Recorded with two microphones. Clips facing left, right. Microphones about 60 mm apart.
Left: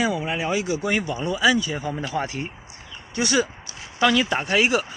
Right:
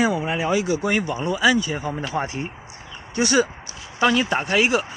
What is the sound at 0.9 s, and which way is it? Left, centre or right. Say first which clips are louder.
Speech: right 2 dB; right.